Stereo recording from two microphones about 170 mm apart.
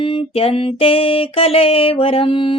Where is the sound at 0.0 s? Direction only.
30° left (ahead or behind).